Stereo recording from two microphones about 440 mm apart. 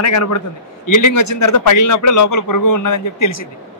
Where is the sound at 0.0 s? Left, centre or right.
Left.